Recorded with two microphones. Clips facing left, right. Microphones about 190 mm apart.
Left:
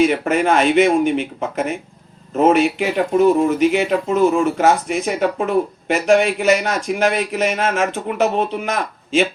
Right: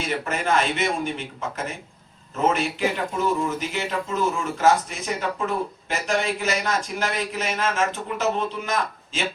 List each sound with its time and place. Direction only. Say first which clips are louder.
0.3 s speech: left 8 dB; 65° left (ahead or behind)